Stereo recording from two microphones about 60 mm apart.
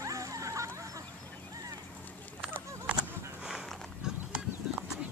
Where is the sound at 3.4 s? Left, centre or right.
Centre.